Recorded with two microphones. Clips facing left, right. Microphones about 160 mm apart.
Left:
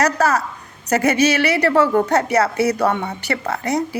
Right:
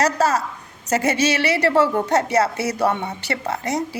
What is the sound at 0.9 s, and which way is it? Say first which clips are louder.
A woman's voice: left 3 dB; 25° right (ahead or behind).